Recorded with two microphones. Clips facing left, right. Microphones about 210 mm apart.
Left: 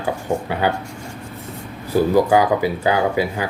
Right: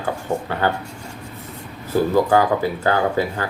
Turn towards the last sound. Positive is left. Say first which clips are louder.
# left 1 dB
turn(degrees=10)  # may be behind; listen again after turning